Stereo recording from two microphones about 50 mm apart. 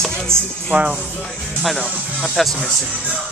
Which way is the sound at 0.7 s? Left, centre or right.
Right.